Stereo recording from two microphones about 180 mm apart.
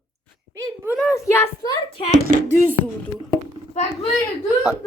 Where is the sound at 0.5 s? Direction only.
15° right (ahead or behind).